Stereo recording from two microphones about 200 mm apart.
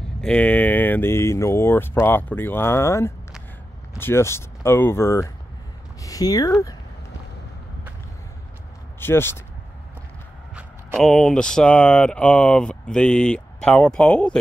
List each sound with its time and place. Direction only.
0.2 s speech: 5° left (ahead or behind)
9.0 s speech: 10° left (ahead or behind)
10.5 s speech: centre (ahead or behind)